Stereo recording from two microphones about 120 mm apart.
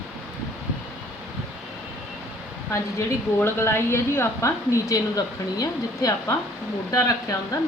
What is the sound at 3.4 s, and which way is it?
A woman's voice, 20° left (ahead or behind).